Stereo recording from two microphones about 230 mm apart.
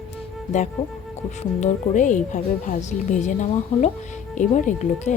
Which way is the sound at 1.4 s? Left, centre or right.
Left.